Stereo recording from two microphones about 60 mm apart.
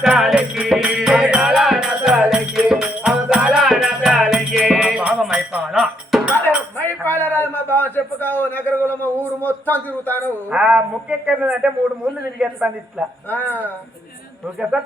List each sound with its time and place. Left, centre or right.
0.0 s music: centre
3.3 s music: centre
5.3 s music: centre
5.8 s music: centre
6.3 s chink: left
7.9 s a sound: left
10.5 s a woman's voice: right
13.2 s speech: left
14.7 s a woman's voice: centre